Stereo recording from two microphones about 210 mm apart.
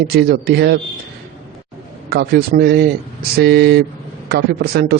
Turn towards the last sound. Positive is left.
turn(degrees=-45)  # may be behind; listen again after turning